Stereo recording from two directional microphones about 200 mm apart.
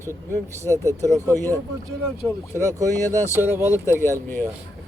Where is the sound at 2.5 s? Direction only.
15° right (ahead or behind).